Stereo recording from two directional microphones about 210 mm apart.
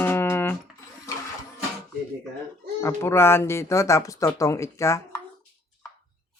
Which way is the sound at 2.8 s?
10° left (ahead or behind).